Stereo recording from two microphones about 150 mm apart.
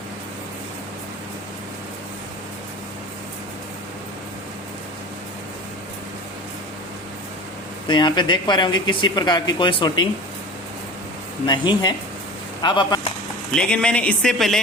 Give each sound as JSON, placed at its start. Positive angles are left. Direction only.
{"t": 7.9, "sound": "speech", "side_deg": 30}
{"t": 11.4, "sound": "speech", "side_deg": 30}
{"t": 13.5, "sound": "speech", "side_deg": 5}